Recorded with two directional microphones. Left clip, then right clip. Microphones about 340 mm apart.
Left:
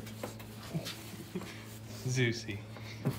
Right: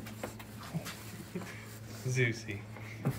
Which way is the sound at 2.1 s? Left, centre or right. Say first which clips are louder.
Right 1 dB; centre.